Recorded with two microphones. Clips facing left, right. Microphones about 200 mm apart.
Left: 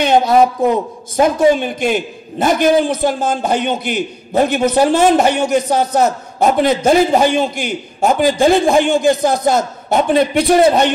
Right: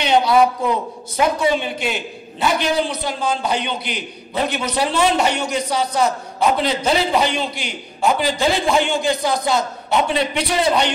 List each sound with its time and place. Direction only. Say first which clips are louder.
0.0 s a man's voice: left 4 dB; 45° left (ahead or behind)